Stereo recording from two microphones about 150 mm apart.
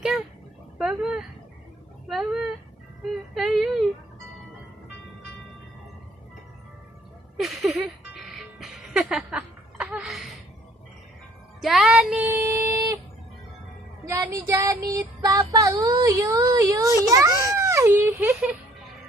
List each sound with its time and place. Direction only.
0.8 s speech: 5° right (ahead or behind)
7.3 s music: centre (ahead or behind)
11.6 s music: centre (ahead or behind); by 13.0 s 20° right (ahead or behind)
14.0 s child singing: 20° right (ahead or behind)
17.5 s baby cry: 20° right (ahead or behind)